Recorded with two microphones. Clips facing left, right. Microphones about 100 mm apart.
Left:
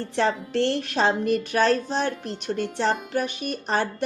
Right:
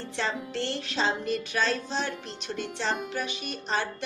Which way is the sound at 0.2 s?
50° left (ahead or behind).